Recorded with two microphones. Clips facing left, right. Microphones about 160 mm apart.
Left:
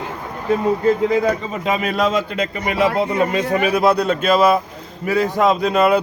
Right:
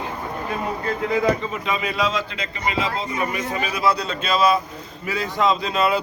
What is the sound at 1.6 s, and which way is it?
Speech, 50° left (ahead or behind).